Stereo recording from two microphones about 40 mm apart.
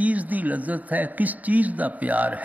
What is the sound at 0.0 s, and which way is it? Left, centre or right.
Speech, right.